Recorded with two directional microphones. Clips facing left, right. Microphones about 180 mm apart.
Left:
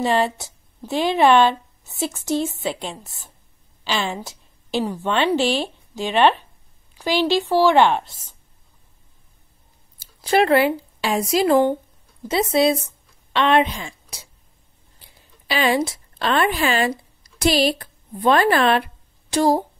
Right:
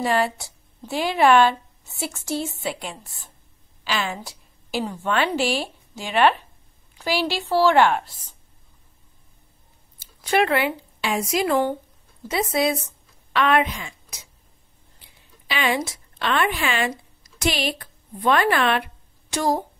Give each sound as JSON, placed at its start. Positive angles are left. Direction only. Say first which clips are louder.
{"t": 0.0, "sound": "a woman's voice", "louder": "left 2 dB", "side_deg": 20}
{"t": 3.8, "sound": "a sound", "louder": "left 2 dB", "side_deg": 30}
{"t": 4.8, "sound": "a woman's voice", "louder": "left 2 dB", "side_deg": 25}
{"t": 9.9, "sound": "a woman's voice", "louder": "left 3 dB", "side_deg": 35}
{"t": 15.4, "sound": "speech", "louder": "left 4 dB", "side_deg": 35}